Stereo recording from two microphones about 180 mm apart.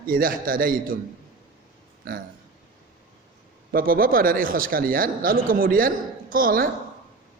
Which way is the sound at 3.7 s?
50° right (ahead or behind).